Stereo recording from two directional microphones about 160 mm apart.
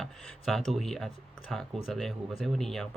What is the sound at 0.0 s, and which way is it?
Speech, centre (ahead or behind).